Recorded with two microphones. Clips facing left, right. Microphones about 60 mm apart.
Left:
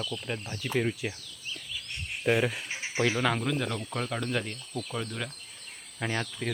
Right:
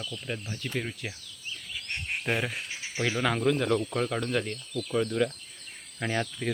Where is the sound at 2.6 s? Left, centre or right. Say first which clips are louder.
Left 2 dB; left.